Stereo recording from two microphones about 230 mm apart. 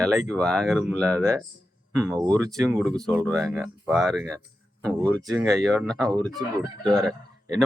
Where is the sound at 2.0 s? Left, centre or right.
Centre.